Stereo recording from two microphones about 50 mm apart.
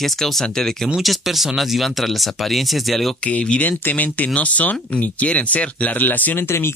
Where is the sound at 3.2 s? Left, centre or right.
Left.